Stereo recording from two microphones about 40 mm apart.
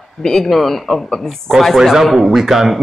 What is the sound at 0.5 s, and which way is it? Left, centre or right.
Speech, centre.